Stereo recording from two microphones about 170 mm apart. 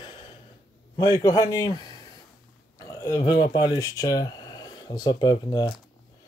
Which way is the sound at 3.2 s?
30° left (ahead or behind).